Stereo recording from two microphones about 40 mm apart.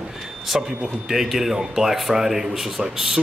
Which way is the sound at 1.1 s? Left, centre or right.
Centre.